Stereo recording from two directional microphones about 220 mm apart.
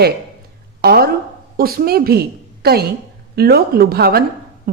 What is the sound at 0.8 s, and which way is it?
A woman's voice, 45° right (ahead or behind).